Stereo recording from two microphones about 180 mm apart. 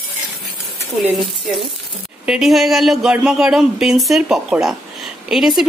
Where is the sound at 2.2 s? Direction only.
5° right (ahead or behind).